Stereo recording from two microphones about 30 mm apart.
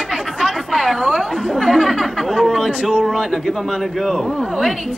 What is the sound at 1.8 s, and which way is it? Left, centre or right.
Chatter, centre.